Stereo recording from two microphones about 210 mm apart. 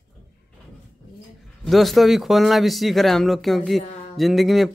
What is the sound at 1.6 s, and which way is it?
Speech, centre (ahead or behind).